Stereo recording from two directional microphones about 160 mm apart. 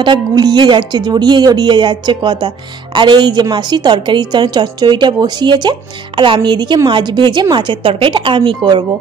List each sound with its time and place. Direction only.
0.0 s speech: 30° right (ahead or behind)